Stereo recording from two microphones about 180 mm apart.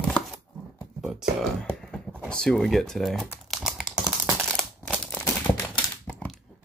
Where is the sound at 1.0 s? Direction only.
Centre (ahead or behind).